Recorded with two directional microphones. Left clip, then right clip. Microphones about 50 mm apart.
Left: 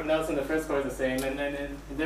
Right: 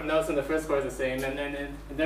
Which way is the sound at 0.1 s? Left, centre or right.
Centre.